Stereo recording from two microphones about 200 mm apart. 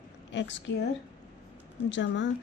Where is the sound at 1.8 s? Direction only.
65° left (ahead or behind).